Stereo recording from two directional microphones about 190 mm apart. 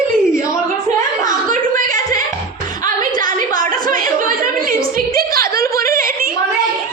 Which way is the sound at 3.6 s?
45° right (ahead or behind).